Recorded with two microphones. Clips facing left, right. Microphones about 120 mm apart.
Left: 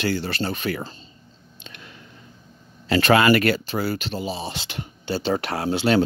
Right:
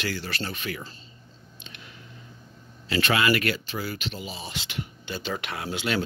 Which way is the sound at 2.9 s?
45° left (ahead or behind).